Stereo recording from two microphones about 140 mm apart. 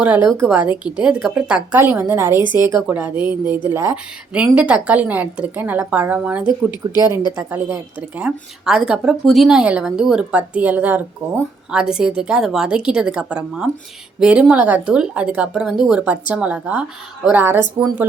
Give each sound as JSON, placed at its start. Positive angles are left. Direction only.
{"t": 0.0, "sound": "a woman's voice", "side_deg": -10}
{"t": 7.1, "sound": "speech", "side_deg": 30}
{"t": 7.3, "sound": "a woman's voice", "side_deg": -15}